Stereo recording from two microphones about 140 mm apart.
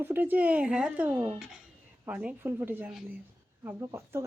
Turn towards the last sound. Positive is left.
turn(degrees=-20)  # may be behind; listen again after turning